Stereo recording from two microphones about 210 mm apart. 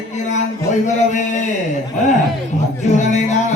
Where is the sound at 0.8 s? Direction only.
35° left (ahead or behind).